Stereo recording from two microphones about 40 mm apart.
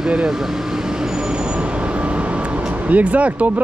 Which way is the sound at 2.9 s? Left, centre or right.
Right.